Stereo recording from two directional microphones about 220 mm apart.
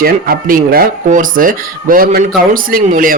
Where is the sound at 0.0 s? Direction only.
40° right (ahead or behind).